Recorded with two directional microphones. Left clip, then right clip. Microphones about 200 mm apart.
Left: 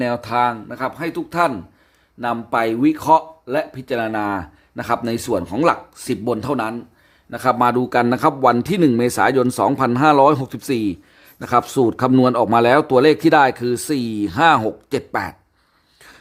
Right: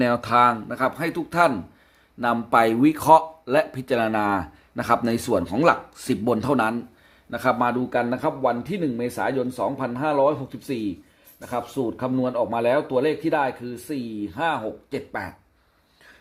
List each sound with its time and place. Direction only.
0.0 s speech: 5° left (ahead or behind)
7.3 s speech: 15° left (ahead or behind)
7.6 s speech: 30° left (ahead or behind)